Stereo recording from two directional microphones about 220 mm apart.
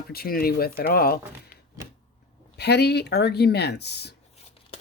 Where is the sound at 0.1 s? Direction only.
45° left (ahead or behind).